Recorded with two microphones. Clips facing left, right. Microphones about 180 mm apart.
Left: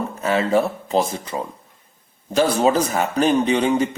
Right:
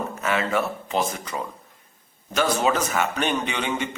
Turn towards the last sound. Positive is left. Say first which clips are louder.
# left 9 dB
turn(degrees=35)  # may be behind; listen again after turning